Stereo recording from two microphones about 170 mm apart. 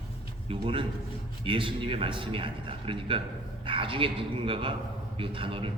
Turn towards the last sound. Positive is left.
turn(degrees=-30)  # may be behind; listen again after turning